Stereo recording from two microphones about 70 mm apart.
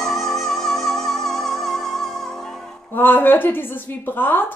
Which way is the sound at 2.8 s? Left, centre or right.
Left.